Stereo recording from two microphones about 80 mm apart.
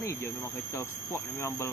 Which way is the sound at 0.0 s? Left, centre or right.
Left.